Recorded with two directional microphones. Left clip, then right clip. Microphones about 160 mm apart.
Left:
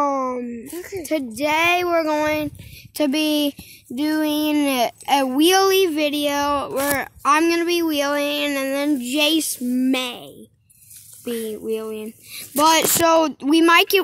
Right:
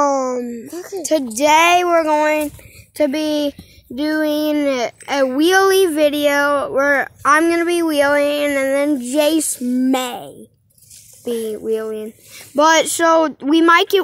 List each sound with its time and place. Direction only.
0.0 s speech: 5° right (ahead or behind)
1.9 s speech: 25° left (ahead or behind)
2.9 s a child's voice: 35° left (ahead or behind)
4.6 s a child's voice: 35° left (ahead or behind); by 9.4 s 15° left (ahead or behind)
9.5 s speech: centre (ahead or behind)
11.4 s a child's voice: 15° left (ahead or behind)